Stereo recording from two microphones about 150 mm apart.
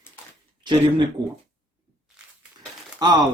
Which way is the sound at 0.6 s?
30° right (ahead or behind).